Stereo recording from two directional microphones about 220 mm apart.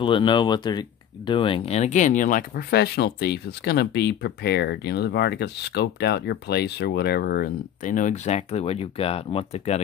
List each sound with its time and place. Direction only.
0.0 s speech: 20° left (ahead or behind)